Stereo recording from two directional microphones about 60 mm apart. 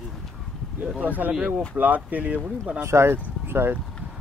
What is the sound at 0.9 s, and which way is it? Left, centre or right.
Speech, right.